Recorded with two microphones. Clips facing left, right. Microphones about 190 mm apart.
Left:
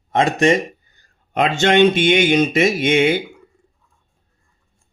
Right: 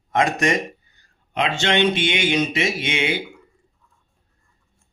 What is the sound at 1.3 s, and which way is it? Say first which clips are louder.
Speech: left 6 dB; 45° left (ahead or behind).